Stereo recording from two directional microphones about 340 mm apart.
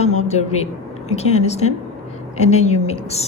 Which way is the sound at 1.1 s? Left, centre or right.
Centre.